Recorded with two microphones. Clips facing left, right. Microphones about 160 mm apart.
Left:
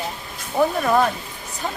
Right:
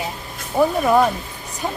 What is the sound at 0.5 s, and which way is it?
Speech, 10° right (ahead or behind).